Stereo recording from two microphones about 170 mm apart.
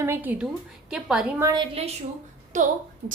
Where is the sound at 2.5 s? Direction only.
45° right (ahead or behind).